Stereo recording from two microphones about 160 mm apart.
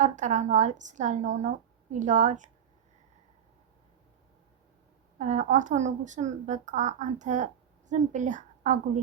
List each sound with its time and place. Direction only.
0.0 s a woman's voice: 50° right (ahead or behind)
5.1 s a woman's voice: 50° right (ahead or behind)